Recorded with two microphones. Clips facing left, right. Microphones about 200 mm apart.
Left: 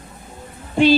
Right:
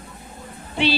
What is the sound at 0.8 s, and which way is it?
Music, 45° left (ahead or behind).